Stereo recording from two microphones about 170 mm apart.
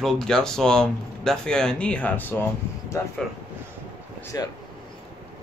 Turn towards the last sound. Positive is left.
turn(degrees=20)  # may be behind; listen again after turning